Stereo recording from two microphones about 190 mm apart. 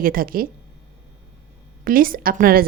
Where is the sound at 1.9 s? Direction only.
50° right (ahead or behind).